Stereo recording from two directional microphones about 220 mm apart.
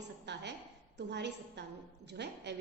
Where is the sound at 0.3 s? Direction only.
50° right (ahead or behind).